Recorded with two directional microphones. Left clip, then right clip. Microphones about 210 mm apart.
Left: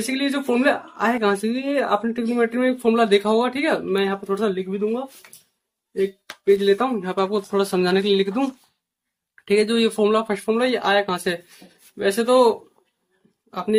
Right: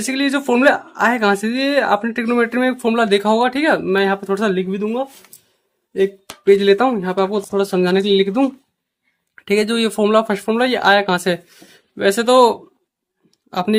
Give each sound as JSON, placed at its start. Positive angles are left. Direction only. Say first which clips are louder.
{"t": 0.0, "sound": "speech", "louder": "right 5 dB", "side_deg": -40}
{"t": 6.5, "sound": "speech", "louder": "right 5 dB", "side_deg": -35}